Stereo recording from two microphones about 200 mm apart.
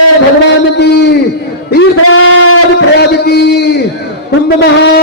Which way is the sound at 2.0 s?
90° left.